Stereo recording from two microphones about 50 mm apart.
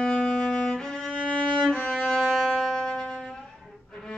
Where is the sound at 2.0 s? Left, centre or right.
Centre.